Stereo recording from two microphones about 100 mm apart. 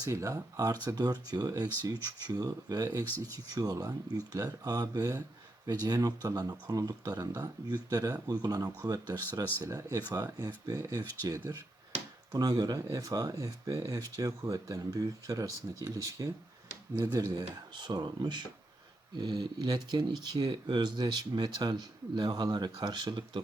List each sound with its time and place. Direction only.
0.0 s speech: 35° right (ahead or behind)
9.6 s speech: 30° right (ahead or behind)
10.8 s speech: 25° right (ahead or behind)
11.2 s speech: 35° right (ahead or behind)
17.3 s speech: 45° right (ahead or behind)